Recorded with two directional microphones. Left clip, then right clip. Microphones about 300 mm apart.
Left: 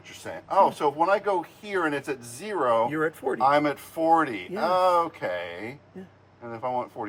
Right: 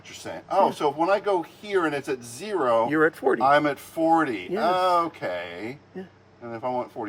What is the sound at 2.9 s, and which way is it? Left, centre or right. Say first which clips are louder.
Speech: right 6 dB; right.